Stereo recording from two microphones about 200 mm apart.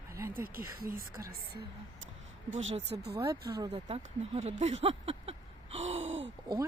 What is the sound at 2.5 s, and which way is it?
Speech, 75° right (ahead or behind).